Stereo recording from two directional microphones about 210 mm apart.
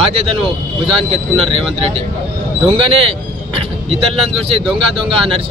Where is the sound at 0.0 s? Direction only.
25° right (ahead or behind).